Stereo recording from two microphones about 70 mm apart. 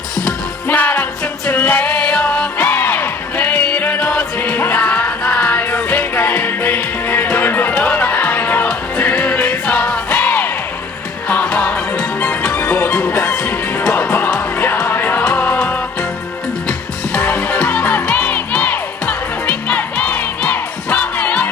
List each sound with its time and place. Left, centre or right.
0.7 s music: left
4.4 s music: left
17.2 s music: left